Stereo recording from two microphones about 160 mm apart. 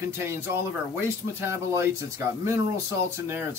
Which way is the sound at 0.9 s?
15° right (ahead or behind).